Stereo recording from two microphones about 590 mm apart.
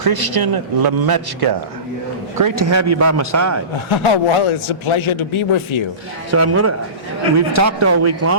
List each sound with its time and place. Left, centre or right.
0.0 s a man's voice: right
3.8 s a man's voice: left
6.3 s a man's voice: right